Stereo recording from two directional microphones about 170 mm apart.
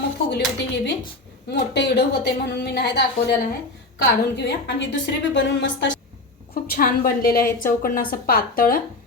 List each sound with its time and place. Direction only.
0.3 s a woman's voice: 90° left
6.5 s a woman's voice: 55° left (ahead or behind)